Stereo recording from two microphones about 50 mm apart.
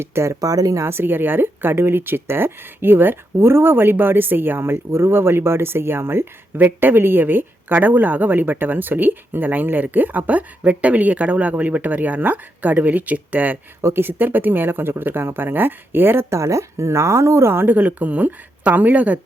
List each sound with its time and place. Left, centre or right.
0.0 s speech: right
0.9 s speech: right
6.6 s a woman's voice: right
13.8 s speech: right
16.3 s speech: right
17.7 s a woman's voice: right